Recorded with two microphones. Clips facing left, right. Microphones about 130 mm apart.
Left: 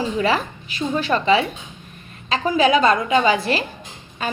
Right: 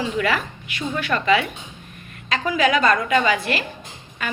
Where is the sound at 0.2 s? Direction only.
30° left (ahead or behind).